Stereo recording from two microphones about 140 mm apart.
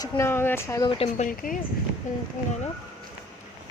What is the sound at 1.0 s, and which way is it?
Speech, 60° left (ahead or behind).